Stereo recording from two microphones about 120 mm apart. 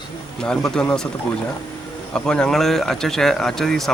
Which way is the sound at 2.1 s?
5° left (ahead or behind).